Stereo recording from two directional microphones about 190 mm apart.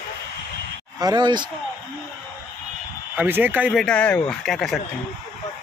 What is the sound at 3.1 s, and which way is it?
Speech, 10° right (ahead or behind).